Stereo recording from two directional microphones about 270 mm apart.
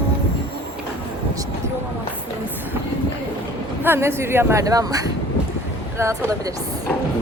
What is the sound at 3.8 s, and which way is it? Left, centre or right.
Speech, centre.